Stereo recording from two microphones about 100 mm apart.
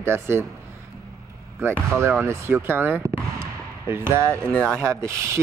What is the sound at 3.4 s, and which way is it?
Basketball bounce, 25° right (ahead or behind).